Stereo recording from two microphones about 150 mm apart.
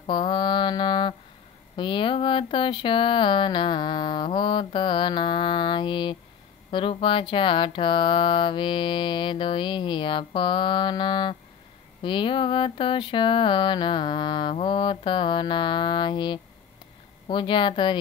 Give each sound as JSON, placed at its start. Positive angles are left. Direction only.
{"t": 0.0, "sound": "mantra", "side_deg": 35}
{"t": 1.8, "sound": "speech", "side_deg": 35}